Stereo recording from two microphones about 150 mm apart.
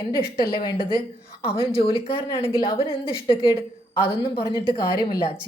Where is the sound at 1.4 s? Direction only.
40° left (ahead or behind).